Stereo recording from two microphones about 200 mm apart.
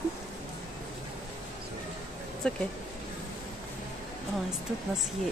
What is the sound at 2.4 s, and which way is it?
Speech, 5° left (ahead or behind).